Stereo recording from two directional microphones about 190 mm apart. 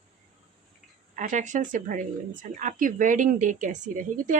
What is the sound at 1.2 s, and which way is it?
Speech, 40° right (ahead or behind).